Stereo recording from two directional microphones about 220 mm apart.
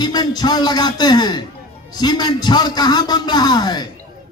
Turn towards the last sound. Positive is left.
turn(degrees=20)  # may be behind; listen again after turning